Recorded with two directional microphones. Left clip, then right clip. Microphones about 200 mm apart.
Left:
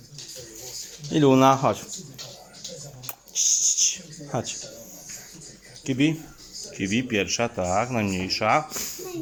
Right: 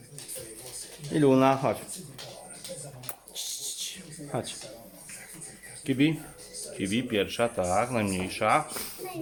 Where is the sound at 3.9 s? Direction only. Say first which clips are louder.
Left 4 dB; 5° left (ahead or behind).